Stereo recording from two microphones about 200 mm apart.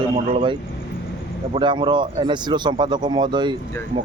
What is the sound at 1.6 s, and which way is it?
Speech, 25° right (ahead or behind).